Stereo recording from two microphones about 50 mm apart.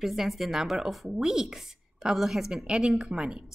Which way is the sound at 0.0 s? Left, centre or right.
Centre.